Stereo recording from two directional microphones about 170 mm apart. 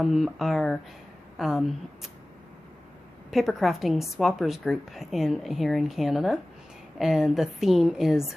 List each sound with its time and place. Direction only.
0.0 s a woman's voice: centre (ahead or behind)
3.3 s a woman's voice: centre (ahead or behind)